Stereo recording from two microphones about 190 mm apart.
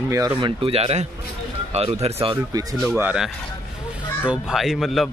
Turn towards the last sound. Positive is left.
turn(degrees=0)  # may be behind; listen again after turning